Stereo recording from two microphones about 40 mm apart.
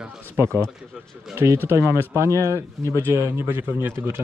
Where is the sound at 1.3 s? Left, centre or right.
Right.